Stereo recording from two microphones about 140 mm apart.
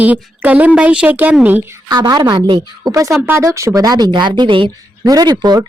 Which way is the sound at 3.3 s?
20° right (ahead or behind).